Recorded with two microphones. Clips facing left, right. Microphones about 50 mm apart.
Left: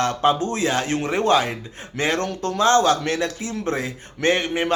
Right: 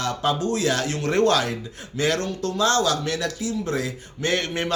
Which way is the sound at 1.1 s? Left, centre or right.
Centre.